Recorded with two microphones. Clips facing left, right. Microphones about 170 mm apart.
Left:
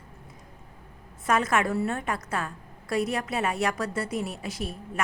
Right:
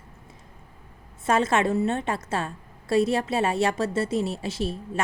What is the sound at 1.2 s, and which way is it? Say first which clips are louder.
A woman's voice: right 3 dB; 25° right (ahead or behind).